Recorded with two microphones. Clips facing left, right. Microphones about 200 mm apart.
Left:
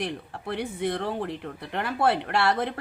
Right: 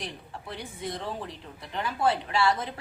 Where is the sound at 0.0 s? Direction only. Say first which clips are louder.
Left 7 dB; 60° left (ahead or behind).